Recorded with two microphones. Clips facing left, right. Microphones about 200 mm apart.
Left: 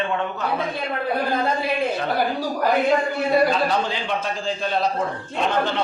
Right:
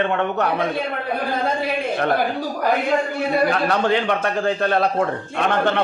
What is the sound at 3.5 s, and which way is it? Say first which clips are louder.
A man's voice: right 3 dB; 60° right (ahead or behind).